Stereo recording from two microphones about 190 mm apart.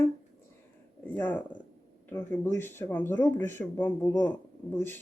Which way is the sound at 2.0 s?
10° left (ahead or behind).